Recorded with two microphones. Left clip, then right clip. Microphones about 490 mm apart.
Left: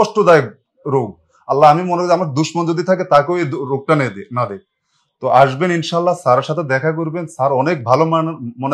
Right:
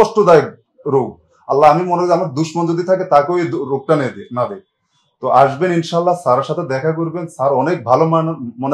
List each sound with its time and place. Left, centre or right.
0.0 s speech: left
1.5 s a man's voice: left